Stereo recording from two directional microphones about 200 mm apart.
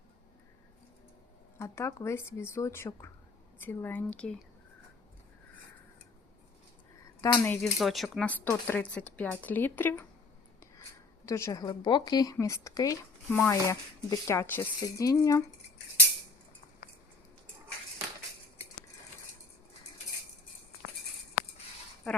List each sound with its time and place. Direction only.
1.5 s speech: 15° left (ahead or behind)
7.2 s speech: 25° left (ahead or behind)
7.4 s speech: 5° left (ahead or behind)
11.3 s speech: 15° left (ahead or behind)
22.0 s a sound: centre (ahead or behind)